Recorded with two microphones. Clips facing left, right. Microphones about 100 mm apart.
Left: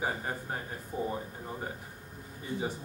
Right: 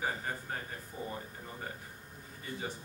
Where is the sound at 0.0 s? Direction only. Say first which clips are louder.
Left 3 dB; 15° left (ahead or behind).